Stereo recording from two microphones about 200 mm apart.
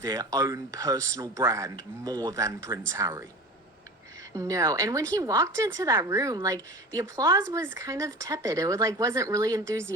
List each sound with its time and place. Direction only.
0.0 s a woman's voice: 15° right (ahead or behind)
4.4 s a woman's voice: 15° right (ahead or behind)